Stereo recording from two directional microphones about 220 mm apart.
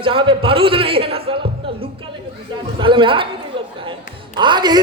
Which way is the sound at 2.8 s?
25° right (ahead or behind).